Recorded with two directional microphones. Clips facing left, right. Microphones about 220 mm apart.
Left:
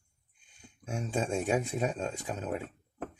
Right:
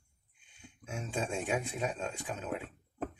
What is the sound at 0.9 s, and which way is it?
Speech, 40° left (ahead or behind).